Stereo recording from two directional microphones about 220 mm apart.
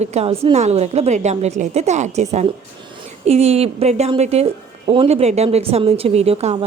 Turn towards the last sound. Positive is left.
turn(degrees=-30)  # may be behind; listen again after turning